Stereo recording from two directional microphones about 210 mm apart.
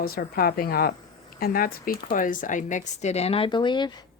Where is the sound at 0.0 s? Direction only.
45° left (ahead or behind); by 4.0 s 20° left (ahead or behind).